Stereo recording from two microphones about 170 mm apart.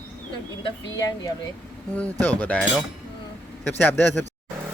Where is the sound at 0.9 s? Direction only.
20° left (ahead or behind).